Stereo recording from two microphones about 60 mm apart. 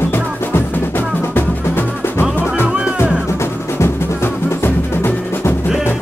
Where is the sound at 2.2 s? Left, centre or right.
Left.